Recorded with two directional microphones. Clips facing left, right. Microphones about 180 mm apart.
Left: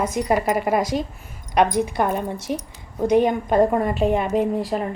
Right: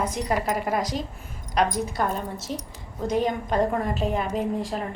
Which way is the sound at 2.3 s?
15° left (ahead or behind).